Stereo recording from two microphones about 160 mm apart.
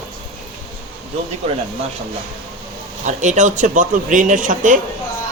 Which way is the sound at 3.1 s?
50° right (ahead or behind).